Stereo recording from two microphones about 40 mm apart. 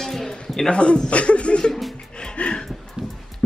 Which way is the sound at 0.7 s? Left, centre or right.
Left.